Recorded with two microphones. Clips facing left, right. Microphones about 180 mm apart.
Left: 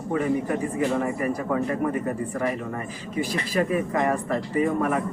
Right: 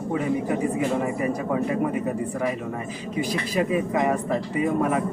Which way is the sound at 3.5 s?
15° right (ahead or behind).